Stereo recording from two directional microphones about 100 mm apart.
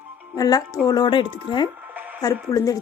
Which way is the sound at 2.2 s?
35° left (ahead or behind).